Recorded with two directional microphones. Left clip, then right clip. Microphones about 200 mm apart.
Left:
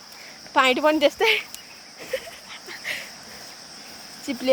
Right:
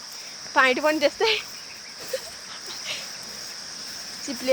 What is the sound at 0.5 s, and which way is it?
Speech, 10° left (ahead or behind).